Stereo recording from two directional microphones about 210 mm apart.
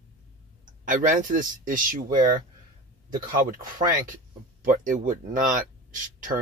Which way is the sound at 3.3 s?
40° right (ahead or behind).